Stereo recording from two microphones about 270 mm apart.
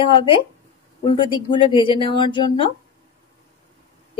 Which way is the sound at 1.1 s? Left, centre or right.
Centre.